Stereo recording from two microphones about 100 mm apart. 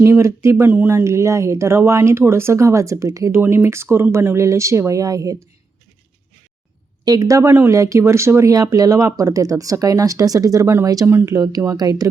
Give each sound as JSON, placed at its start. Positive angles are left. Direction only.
{"t": 0.0, "sound": "speech", "side_deg": -25}
{"t": 7.0, "sound": "speech", "side_deg": -40}